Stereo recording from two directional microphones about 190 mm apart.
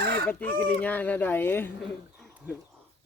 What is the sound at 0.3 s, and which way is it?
Speech, 5° left (ahead or behind).